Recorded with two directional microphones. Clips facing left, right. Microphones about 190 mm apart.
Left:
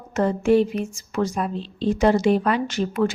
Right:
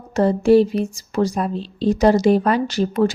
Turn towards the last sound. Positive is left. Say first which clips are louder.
# right 4 dB
turn(degrees=-35)  # may be behind; listen again after turning